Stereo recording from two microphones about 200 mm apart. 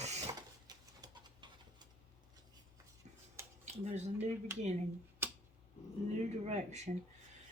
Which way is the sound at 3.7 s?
35° right (ahead or behind).